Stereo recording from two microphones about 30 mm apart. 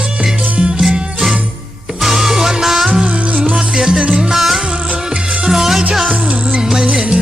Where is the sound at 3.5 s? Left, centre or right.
Centre.